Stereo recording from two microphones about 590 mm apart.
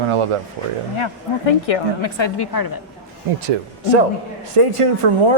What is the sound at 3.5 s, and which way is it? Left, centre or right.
Speech, right.